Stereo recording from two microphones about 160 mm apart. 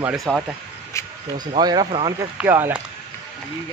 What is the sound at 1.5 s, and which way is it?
Speech, 25° right (ahead or behind).